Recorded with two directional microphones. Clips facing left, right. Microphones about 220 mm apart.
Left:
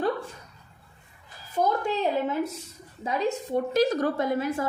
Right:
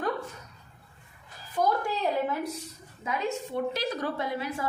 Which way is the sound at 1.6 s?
25° left (ahead or behind).